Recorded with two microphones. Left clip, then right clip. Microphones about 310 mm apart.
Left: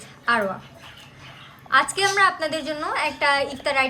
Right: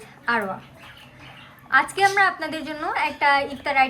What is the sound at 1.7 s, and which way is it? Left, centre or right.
A woman's voice, centre.